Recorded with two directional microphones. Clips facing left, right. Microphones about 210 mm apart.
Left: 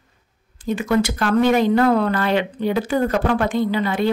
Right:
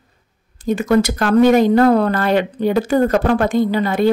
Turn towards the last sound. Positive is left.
turn(degrees=-45)  # may be behind; listen again after turning